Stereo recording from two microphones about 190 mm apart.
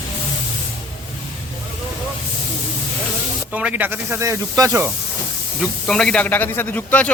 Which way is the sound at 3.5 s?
5° right (ahead or behind).